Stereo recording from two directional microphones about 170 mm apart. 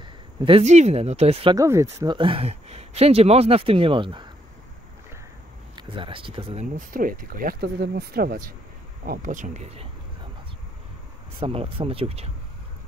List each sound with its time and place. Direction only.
0.0 s speech: 30° right (ahead or behind)
1.5 s speech: 20° right (ahead or behind)
5.8 s speech: 30° right (ahead or behind)
11.3 s speech: 35° right (ahead or behind)